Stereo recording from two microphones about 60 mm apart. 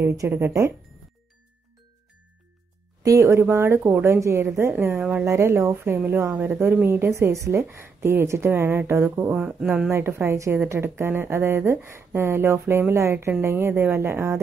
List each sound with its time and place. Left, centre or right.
0.0 s speech: right
3.0 s speech: right
3.5 s speech: right
6.9 s speech: right
9.3 s speech: centre
9.8 s speech: right